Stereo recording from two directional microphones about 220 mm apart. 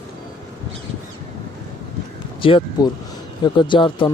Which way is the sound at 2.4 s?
20° left (ahead or behind).